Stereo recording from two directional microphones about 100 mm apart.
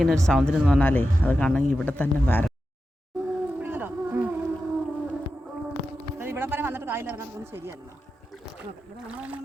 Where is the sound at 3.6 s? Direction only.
20° right (ahead or behind).